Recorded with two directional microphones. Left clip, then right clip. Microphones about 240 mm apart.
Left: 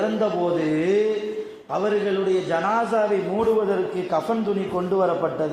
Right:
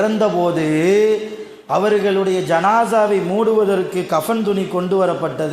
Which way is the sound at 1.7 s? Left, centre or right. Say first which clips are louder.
Right 7 dB; right.